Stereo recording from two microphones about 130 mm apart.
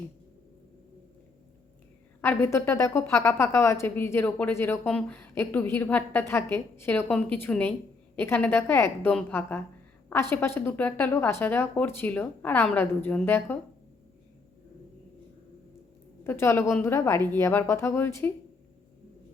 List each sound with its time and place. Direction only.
2.2 s a woman's voice: 20° left (ahead or behind)
16.2 s a woman's voice: 20° left (ahead or behind)